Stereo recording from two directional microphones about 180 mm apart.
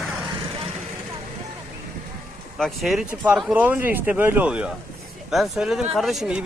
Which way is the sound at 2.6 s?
Centre (ahead or behind).